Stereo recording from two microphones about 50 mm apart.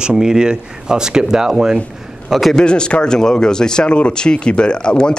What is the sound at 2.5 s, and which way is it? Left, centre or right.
Speech, centre.